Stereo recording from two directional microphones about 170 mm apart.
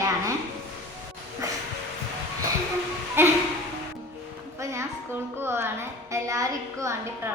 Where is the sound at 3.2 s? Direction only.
15° right (ahead or behind).